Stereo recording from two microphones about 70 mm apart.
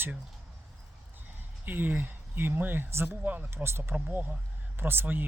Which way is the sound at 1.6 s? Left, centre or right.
Right.